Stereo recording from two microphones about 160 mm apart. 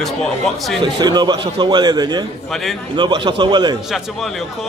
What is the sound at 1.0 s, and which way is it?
A man's voice, 25° right (ahead or behind).